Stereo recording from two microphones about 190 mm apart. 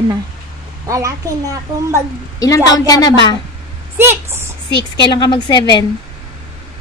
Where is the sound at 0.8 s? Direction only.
15° right (ahead or behind).